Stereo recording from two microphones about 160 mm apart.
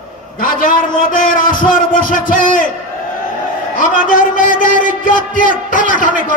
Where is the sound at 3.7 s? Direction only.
55° left (ahead or behind).